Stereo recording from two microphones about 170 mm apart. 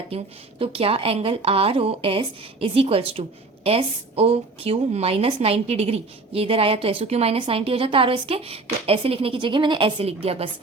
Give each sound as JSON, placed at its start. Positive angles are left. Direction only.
{"t": 0.6, "sound": "a woman's voice", "side_deg": -35}